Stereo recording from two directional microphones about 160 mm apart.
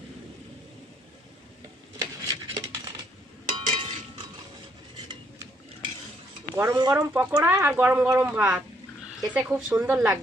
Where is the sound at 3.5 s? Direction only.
35° right (ahead or behind).